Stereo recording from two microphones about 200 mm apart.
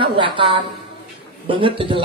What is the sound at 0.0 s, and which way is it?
A woman's voice, 25° right (ahead or behind).